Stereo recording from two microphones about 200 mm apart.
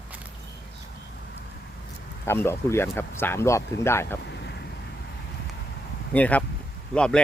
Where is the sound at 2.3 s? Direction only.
10° left (ahead or behind).